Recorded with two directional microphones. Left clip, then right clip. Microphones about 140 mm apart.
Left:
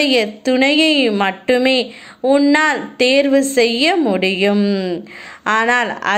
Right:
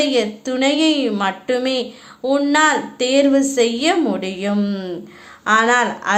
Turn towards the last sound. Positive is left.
turn(degrees=35)  # may be behind; listen again after turning